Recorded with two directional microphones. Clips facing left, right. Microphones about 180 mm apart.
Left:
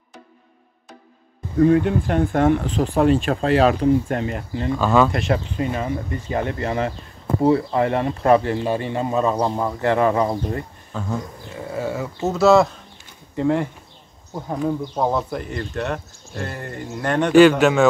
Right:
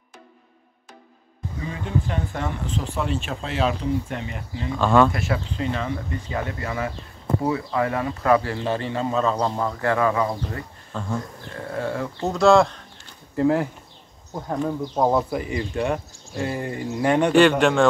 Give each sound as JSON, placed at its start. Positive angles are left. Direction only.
{"t": 1.6, "sound": "speech", "side_deg": 60}
{"t": 4.7, "sound": "a man's voice", "side_deg": 5}
{"t": 6.3, "sound": "speech", "side_deg": 30}
{"t": 10.9, "sound": "a man's voice", "side_deg": 5}
{"t": 15.0, "sound": "speech", "side_deg": -10}
{"t": 17.3, "sound": "a man's voice", "side_deg": 5}